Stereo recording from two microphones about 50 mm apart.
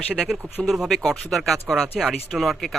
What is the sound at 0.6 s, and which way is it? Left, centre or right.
Speech, centre.